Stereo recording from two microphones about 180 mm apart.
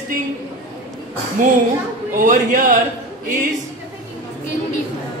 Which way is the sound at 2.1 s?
50° right (ahead or behind).